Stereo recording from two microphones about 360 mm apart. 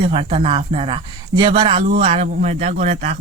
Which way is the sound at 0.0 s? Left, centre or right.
Centre.